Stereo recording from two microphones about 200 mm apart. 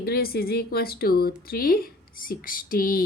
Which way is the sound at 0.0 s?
50° left (ahead or behind).